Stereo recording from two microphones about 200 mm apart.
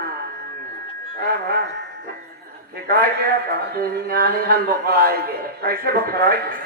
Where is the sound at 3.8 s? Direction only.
45° right (ahead or behind).